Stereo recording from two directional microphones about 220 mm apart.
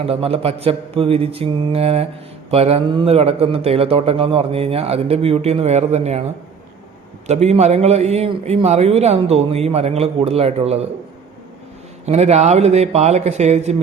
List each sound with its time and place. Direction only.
0.0 s a man's voice: 25° right (ahead or behind)
7.3 s a man's voice: 30° right (ahead or behind)
12.0 s a man's voice: 30° right (ahead or behind)